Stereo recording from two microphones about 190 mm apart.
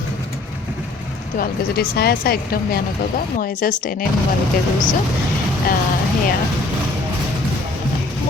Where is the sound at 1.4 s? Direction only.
55° left (ahead or behind).